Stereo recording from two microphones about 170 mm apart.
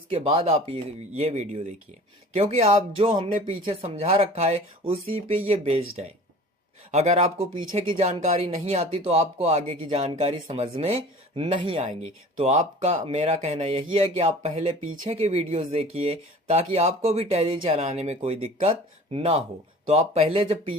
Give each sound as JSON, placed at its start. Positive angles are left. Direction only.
{"t": 0.1, "sound": "speech", "side_deg": -35}
{"t": 19.9, "sound": "speech", "side_deg": -35}